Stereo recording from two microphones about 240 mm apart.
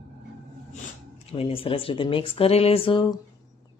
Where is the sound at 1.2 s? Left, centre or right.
Left.